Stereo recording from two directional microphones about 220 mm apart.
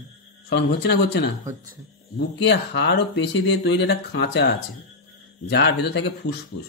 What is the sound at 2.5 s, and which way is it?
A man's voice, 50° left (ahead or behind).